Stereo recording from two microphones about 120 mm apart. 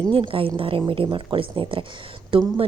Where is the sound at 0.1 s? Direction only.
45° right (ahead or behind).